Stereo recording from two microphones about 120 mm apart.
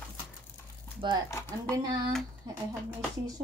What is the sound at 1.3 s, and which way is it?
Speech, 25° left (ahead or behind).